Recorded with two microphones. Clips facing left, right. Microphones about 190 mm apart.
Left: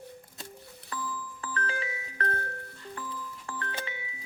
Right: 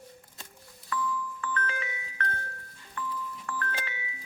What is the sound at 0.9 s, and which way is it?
Music, 30° left (ahead or behind).